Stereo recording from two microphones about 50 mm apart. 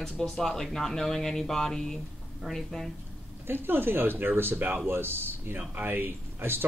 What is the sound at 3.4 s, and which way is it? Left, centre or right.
Speech, right.